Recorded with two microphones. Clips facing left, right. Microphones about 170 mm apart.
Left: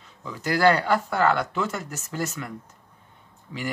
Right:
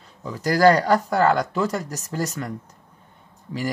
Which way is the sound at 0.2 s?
40° right (ahead or behind).